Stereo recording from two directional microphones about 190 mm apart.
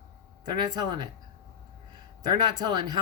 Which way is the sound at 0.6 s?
20° right (ahead or behind).